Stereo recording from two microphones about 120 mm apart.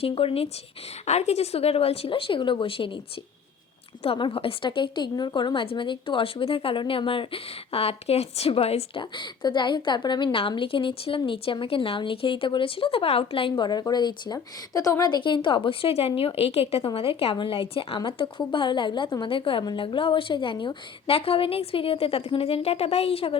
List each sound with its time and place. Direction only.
0.0 s a woman's voice: 50° left (ahead or behind)
1.0 s a woman's voice: 70° left (ahead or behind); by 3.0 s 45° left (ahead or behind)
4.0 s a woman's voice: 50° left (ahead or behind)